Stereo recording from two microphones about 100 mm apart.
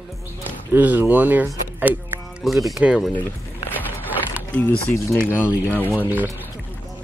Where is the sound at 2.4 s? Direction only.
Centre (ahead or behind).